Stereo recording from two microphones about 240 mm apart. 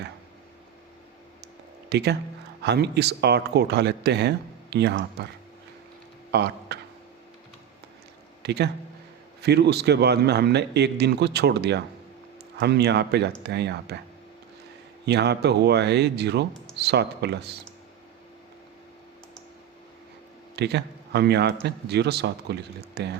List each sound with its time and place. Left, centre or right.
1.9 s a man's voice: right
6.3 s speech: right
8.4 s a man's voice: right
15.0 s a man's voice: right
20.6 s a man's voice: right